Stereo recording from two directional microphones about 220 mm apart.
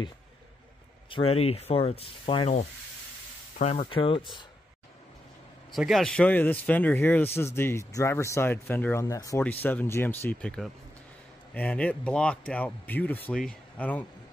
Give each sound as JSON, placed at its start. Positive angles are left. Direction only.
{"t": 1.1, "sound": "speech", "side_deg": 25}
{"t": 5.7, "sound": "speech", "side_deg": 0}